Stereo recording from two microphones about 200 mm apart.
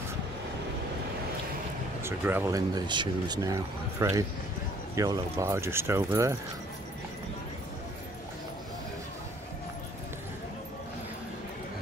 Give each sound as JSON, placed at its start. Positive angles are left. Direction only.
{"t": 2.0, "sound": "speech", "side_deg": -10}